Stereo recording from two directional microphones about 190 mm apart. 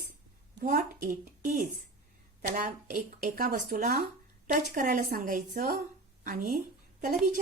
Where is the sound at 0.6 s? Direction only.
45° right (ahead or behind).